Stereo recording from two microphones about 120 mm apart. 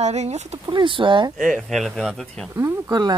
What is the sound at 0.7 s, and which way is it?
Speech, 45° right (ahead or behind).